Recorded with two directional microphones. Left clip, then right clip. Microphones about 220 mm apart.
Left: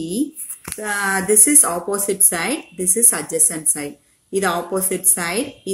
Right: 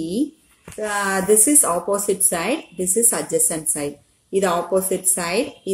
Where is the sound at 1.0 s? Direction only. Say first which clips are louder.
Even; 25° left (ahead or behind).